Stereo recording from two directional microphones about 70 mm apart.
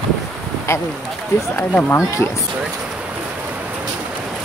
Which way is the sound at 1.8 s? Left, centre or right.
Left.